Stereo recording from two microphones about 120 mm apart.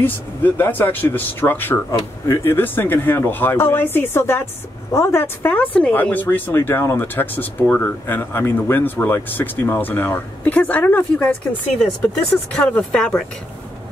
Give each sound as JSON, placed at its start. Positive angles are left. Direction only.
{"t": 0.0, "sound": "speech", "side_deg": 15}
{"t": 12.5, "sound": "speech", "side_deg": 10}